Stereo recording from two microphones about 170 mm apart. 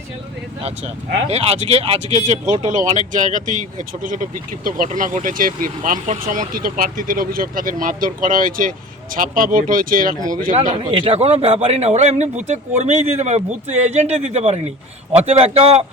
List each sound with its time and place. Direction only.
1.3 s speech: 35° right (ahead or behind); by 10.2 s 55° right (ahead or behind)
10.5 s a man's voice: 30° right (ahead or behind)